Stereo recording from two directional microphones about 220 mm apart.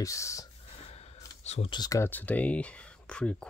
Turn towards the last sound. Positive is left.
turn(degrees=5)  # may be behind; listen again after turning